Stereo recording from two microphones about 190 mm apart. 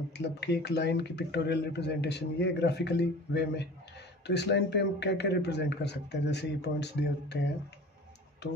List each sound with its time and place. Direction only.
0.2 s speech: 60° left (ahead or behind)